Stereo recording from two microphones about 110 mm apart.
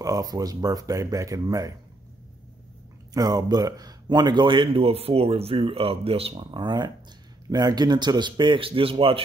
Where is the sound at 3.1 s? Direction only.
35° right (ahead or behind); by 6.5 s 60° right (ahead or behind).